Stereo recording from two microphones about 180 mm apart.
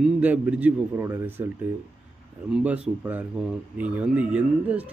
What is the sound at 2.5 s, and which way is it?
Speech, 5° right (ahead or behind).